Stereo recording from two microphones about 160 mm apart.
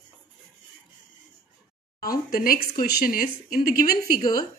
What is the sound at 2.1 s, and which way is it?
A woman's voice, 65° left (ahead or behind).